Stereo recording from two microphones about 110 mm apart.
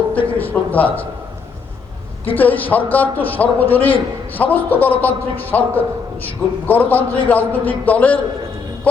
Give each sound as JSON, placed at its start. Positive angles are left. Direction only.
{"t": 0.1, "sound": "a sound", "side_deg": 15}
{"t": 0.5, "sound": "a man's voice", "side_deg": 15}
{"t": 2.3, "sound": "a man's voice", "side_deg": 15}